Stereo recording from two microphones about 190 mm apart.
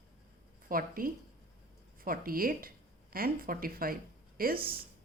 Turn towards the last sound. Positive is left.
turn(degrees=-50)  # may be behind; listen again after turning